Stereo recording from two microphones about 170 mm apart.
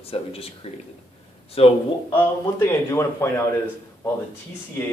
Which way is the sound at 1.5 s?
35° left (ahead or behind).